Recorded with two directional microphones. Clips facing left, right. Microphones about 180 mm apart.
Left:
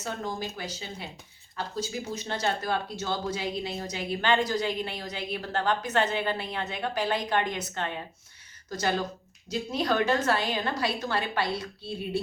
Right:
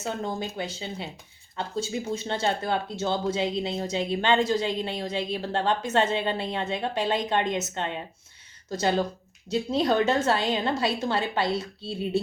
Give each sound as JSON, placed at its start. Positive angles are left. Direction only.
{"t": 0.0, "sound": "speech", "side_deg": -25}